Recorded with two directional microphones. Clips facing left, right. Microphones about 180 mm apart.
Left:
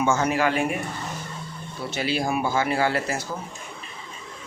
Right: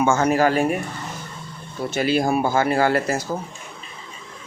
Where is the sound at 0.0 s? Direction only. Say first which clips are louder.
Right 4 dB; 50° right (ahead or behind).